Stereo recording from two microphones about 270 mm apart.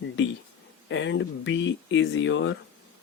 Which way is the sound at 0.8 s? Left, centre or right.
Left.